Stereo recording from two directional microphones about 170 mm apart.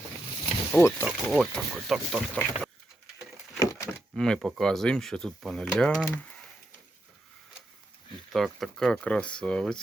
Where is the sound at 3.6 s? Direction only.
20° left (ahead or behind).